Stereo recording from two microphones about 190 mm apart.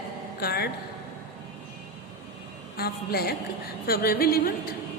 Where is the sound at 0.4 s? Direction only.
55° left (ahead or behind).